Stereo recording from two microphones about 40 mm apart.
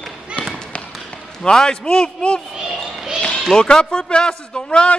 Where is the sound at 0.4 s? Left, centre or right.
Left.